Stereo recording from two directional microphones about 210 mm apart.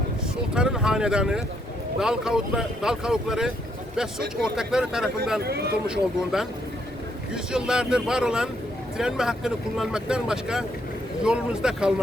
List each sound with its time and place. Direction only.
0.5 s speech: 5° right (ahead or behind)
5.4 s speech: 50° right (ahead or behind)
5.9 s speech: 5° right (ahead or behind)